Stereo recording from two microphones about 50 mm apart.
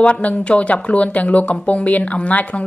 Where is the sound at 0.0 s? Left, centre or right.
Left.